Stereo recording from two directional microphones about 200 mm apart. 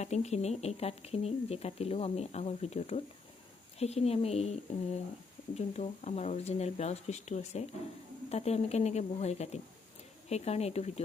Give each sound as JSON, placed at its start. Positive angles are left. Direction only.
{"t": 0.0, "sound": "speech", "side_deg": 35}